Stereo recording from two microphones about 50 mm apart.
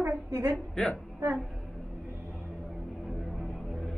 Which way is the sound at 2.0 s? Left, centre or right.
Right.